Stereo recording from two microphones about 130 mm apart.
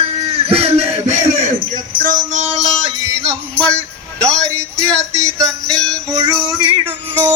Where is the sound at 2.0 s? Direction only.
90° right; by 2.7 s 60° right (ahead or behind).